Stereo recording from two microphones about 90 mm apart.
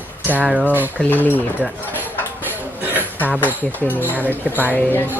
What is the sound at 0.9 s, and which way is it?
Speech, 20° left (ahead or behind).